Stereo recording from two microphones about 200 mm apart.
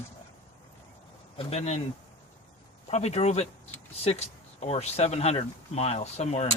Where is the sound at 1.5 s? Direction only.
35° left (ahead or behind).